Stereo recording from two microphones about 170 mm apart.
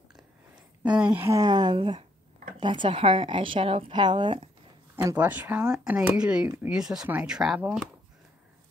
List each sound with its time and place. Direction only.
0.9 s a woman's voice: 10° right (ahead or behind); by 4.5 s 30° right (ahead or behind)
4.9 s speech: 10° right (ahead or behind)